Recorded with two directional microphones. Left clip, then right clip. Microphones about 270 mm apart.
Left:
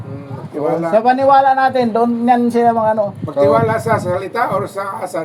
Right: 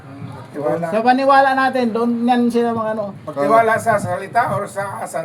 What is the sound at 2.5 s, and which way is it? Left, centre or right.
Speech, centre.